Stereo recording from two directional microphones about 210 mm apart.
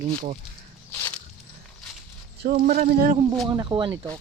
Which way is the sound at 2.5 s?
40° right (ahead or behind).